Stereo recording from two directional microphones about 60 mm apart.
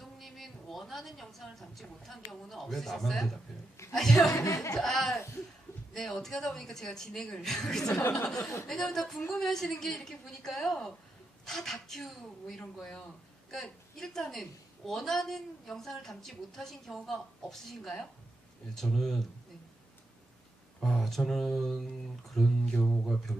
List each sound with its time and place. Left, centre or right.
0.0 s a woman's voice: centre
4.3 s speech: left
4.8 s a woman's voice: centre
8.0 s speech: left
8.6 s a woman's voice: centre
20.8 s a woman's voice: centre